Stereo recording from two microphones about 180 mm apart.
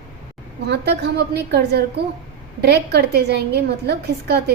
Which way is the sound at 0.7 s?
65° right (ahead or behind).